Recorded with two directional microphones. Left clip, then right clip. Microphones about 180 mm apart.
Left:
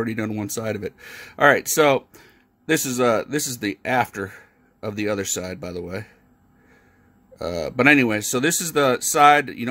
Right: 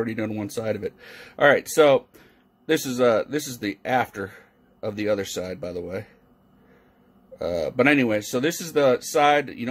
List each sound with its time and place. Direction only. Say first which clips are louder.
0.0 s speech: left 1 dB; 40° left (ahead or behind)
7.3 s speech: right 1 dB; 35° left (ahead or behind)